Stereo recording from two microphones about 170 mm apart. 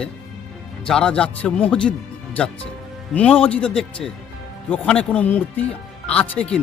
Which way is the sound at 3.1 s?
10° left (ahead or behind).